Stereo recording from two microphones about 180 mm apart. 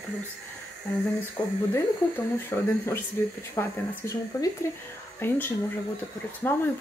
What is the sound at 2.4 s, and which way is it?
Speech, 15° left (ahead or behind).